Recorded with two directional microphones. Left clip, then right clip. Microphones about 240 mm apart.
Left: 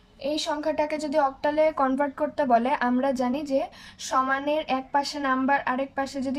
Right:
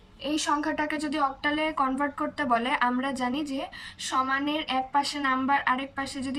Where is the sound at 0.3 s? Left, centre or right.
Centre.